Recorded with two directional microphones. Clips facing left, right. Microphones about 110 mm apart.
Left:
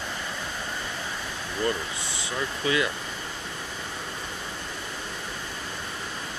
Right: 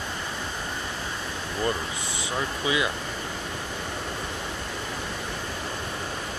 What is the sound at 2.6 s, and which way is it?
Speech, 20° right (ahead or behind).